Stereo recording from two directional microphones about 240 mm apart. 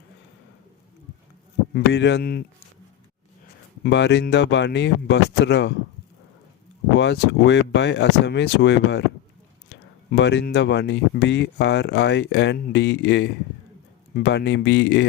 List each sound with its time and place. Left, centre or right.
1.7 s speech: left
3.8 s speech: left
6.9 s speech: left